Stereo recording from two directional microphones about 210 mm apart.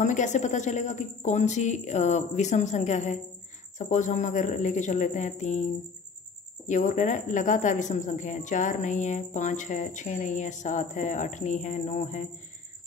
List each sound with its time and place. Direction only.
0.0 s a woman's voice: 35° left (ahead or behind)
6.7 s a woman's voice: 35° left (ahead or behind)